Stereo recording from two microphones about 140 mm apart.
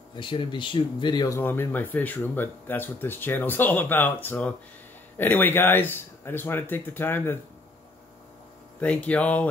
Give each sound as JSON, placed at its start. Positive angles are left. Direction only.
{"t": 0.1, "sound": "speech", "side_deg": 35}
{"t": 1.4, "sound": "speech", "side_deg": 15}
{"t": 8.8, "sound": "speech", "side_deg": 10}